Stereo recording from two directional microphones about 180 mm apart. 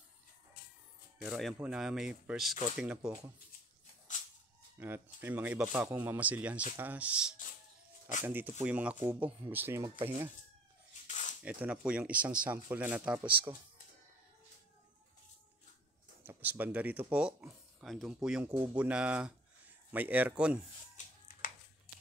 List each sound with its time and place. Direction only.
1.2 s speech: centre (ahead or behind)
4.1 s a sound: 45° left (ahead or behind)
4.7 s speech: 10° right (ahead or behind)
11.1 s a sound: 40° left (ahead or behind)
11.4 s speech: 5° right (ahead or behind)
16.3 s speech: 10° right (ahead or behind)